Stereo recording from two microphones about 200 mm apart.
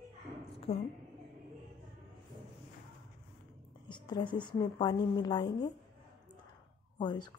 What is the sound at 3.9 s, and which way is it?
A woman's voice, 20° left (ahead or behind).